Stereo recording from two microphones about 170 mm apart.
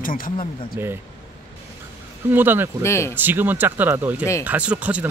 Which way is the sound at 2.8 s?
15° left (ahead or behind).